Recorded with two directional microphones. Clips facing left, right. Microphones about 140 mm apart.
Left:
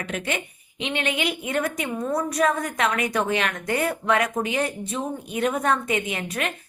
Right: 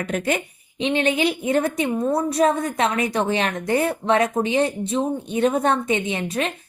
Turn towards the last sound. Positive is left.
turn(degrees=-30)  # may be behind; listen again after turning